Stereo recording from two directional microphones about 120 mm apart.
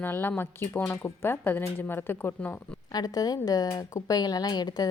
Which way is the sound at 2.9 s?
35° left (ahead or behind).